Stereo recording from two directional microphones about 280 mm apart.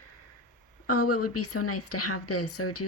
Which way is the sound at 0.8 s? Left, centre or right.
Left.